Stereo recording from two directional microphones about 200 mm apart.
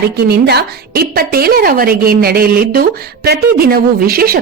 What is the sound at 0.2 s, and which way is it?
Speech, 55° right (ahead or behind).